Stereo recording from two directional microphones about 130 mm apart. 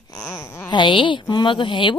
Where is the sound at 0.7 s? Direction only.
40° left (ahead or behind).